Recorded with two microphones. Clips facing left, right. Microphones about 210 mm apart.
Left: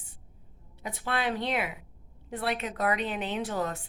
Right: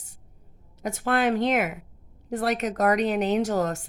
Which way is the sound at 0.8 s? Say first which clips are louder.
Right 8 dB; 45° right (ahead or behind).